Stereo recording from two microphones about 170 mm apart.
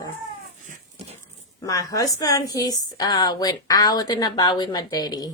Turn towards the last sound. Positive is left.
turn(degrees=20)  # may be behind; listen again after turning